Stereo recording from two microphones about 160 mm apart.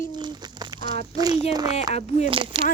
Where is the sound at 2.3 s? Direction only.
35° right (ahead or behind).